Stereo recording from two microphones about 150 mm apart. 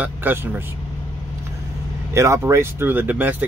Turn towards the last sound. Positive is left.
turn(degrees=-10)  # may be behind; listen again after turning